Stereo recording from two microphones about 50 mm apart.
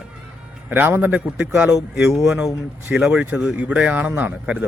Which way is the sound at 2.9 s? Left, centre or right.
Centre.